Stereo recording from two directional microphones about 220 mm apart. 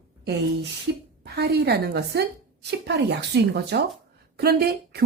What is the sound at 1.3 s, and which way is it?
Speech, 45° right (ahead or behind).